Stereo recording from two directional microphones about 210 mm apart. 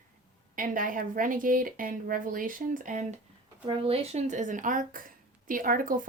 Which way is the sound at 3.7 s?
25° right (ahead or behind).